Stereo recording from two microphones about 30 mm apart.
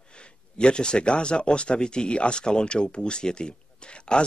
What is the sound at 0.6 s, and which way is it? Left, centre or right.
Speech, left.